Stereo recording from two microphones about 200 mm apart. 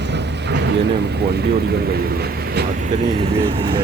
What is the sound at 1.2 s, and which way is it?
Speech, 55° right (ahead or behind).